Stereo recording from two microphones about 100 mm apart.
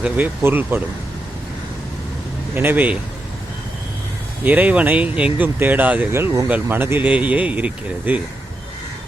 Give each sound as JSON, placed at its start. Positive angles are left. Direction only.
{"t": 0.4, "sound": "speech", "side_deg": -20}
{"t": 2.6, "sound": "speech", "side_deg": -15}
{"t": 4.4, "sound": "speech", "side_deg": -15}